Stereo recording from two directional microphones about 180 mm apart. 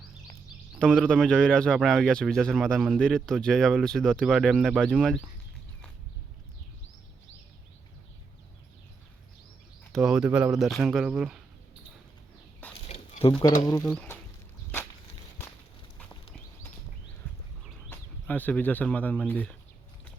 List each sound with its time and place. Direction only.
0.8 s speech: 5° left (ahead or behind)
9.9 s speech: centre (ahead or behind)
12.9 s a sound: 30° left (ahead or behind)
13.8 s speech: 5° left (ahead or behind)
17.2 s horse: 10° left (ahead or behind)
17.8 s speech: 10° left (ahead or behind)